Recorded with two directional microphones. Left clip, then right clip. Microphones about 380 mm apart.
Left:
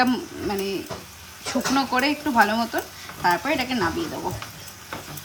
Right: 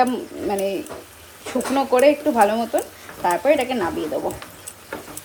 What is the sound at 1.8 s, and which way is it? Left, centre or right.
Speech, centre.